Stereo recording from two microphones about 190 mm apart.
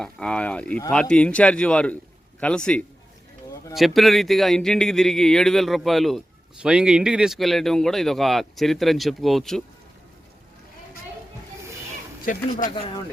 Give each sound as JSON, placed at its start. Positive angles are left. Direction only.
{"t": 0.0, "sound": "speech", "side_deg": 5}
{"t": 12.3, "sound": "speech", "side_deg": 45}
{"t": 12.7, "sound": "speech", "side_deg": 25}